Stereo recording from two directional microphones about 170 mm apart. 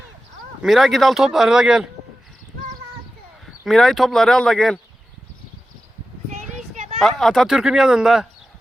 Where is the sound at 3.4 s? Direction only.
Centre (ahead or behind).